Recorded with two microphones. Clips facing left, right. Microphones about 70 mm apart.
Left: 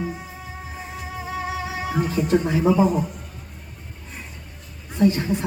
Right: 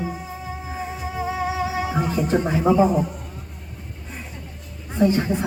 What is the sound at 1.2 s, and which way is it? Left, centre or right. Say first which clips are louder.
Music: right 4 dB; centre.